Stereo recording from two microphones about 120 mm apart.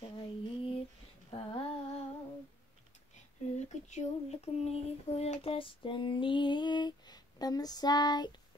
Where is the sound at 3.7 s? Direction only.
75° left (ahead or behind); by 8.3 s 35° left (ahead or behind).